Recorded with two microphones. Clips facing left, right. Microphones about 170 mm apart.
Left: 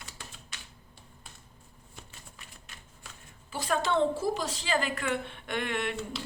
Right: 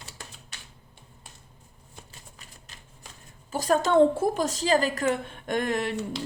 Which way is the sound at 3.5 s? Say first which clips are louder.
Right 7 dB; 45° right (ahead or behind).